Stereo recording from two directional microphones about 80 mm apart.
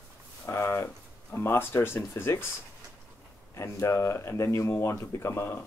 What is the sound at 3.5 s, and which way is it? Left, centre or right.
Speech, left.